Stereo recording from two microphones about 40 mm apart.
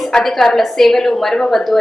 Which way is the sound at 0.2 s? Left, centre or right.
Centre.